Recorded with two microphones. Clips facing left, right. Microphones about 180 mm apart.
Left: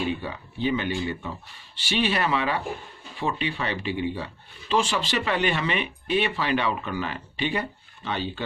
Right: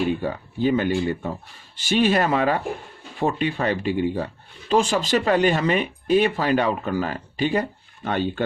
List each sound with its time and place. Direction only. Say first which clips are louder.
0.0 s speech: right 5 dB; 45° right (ahead or behind)